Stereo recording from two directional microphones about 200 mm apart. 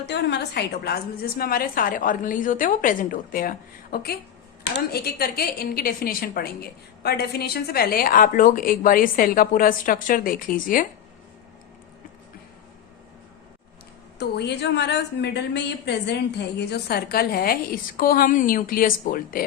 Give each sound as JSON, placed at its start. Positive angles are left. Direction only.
{"t": 0.0, "sound": "a woman's voice", "side_deg": 55}
{"t": 14.2, "sound": "a woman's voice", "side_deg": 55}